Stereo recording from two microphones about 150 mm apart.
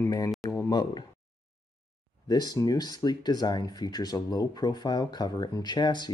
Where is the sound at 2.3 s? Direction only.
25° left (ahead or behind).